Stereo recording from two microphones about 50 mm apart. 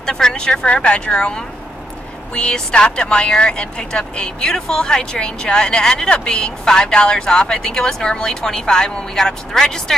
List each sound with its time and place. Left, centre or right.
0.0 s speech: centre